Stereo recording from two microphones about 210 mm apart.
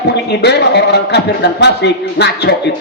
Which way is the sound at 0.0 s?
55° left (ahead or behind).